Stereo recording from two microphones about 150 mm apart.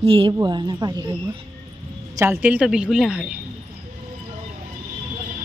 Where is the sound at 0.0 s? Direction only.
40° right (ahead or behind).